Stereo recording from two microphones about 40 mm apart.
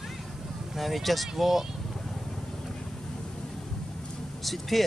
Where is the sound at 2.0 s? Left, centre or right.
Centre.